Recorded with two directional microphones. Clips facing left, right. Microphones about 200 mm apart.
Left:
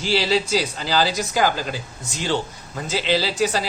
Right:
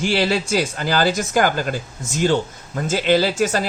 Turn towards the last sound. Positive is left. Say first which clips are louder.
# right 3 dB
turn(degrees=-50)  # may be behind; listen again after turning